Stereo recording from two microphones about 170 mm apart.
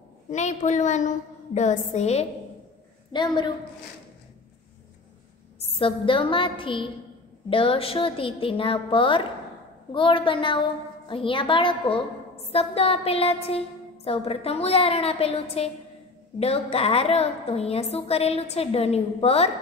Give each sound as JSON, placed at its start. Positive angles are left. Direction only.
{"t": 0.3, "sound": "a woman's voice", "side_deg": 45}
{"t": 3.1, "sound": "a woman's voice", "side_deg": 25}
{"t": 5.6, "sound": "a woman's voice", "side_deg": 35}